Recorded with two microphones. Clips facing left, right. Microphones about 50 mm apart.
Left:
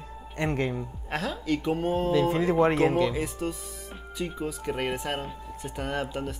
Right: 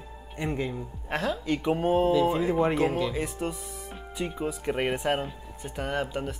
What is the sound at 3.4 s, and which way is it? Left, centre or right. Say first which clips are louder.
Speech: even; centre.